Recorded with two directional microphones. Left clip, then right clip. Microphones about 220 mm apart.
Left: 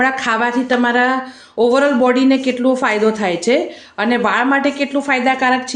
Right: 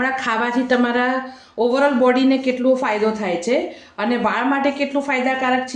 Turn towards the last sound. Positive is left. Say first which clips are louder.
# left 4 dB
turn(degrees=25)  # may be behind; listen again after turning